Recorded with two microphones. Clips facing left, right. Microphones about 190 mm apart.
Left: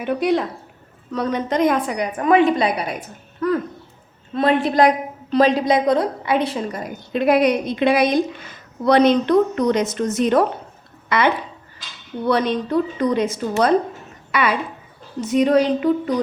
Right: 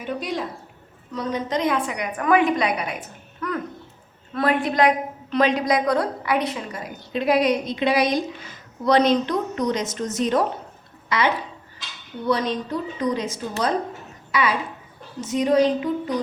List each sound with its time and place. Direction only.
0.0 s a woman's voice: 65° left (ahead or behind); by 2.0 s 40° left (ahead or behind)
2.1 s a woman's voice: 25° left (ahead or behind); by 16.1 s 65° left (ahead or behind)